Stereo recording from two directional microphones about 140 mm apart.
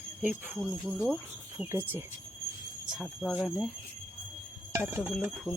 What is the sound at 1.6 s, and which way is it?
Speech, 15° right (ahead or behind).